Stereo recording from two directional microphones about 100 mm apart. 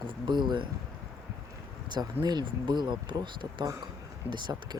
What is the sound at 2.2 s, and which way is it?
Speech, 50° right (ahead or behind).